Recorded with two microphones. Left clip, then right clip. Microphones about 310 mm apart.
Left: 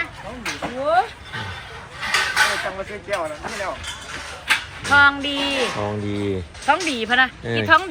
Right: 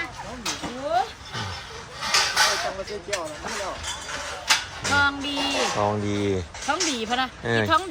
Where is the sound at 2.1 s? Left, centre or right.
Centre.